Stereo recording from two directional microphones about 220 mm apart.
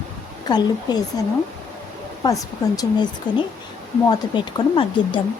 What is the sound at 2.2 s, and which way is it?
Speech, 15° left (ahead or behind).